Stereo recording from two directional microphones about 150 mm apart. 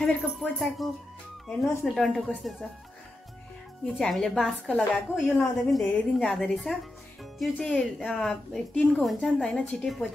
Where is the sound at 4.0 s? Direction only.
5° left (ahead or behind).